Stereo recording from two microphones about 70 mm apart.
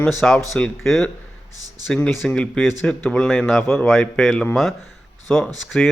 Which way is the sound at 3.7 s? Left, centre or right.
Left.